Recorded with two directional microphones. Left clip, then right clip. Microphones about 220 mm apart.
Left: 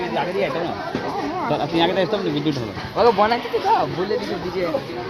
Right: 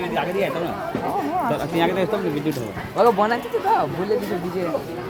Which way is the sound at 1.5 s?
30° left (ahead or behind).